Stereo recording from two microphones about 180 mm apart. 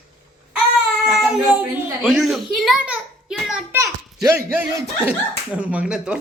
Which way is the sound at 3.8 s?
15° right (ahead or behind).